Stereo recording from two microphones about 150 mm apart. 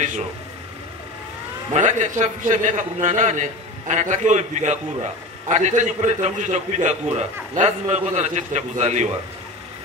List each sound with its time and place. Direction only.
1.7 s a man's voice: 55° right (ahead or behind)